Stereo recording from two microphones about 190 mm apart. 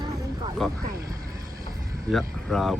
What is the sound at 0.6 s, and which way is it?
Speech, centre (ahead or behind).